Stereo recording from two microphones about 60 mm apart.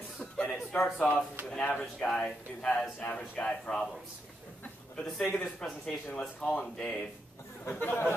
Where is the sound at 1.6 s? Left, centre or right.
Centre.